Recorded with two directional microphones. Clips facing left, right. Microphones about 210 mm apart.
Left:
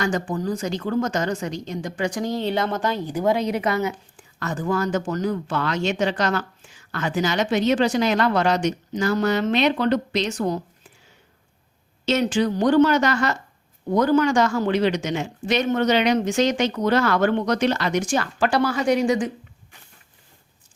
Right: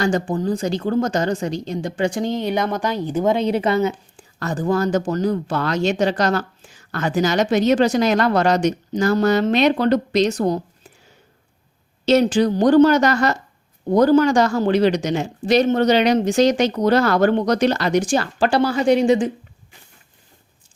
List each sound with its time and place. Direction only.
0.0 s a woman's voice: 30° right (ahead or behind)
12.0 s a woman's voice: 35° right (ahead or behind)